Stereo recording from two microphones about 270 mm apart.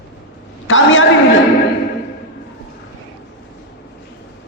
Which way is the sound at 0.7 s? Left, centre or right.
Left.